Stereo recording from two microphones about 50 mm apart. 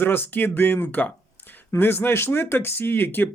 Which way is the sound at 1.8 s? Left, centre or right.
Left.